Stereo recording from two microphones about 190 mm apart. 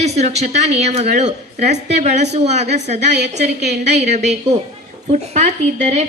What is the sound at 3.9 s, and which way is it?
A man's voice, 35° right (ahead or behind).